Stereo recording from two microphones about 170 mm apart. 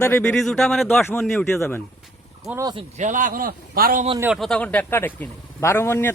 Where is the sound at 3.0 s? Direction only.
50° right (ahead or behind).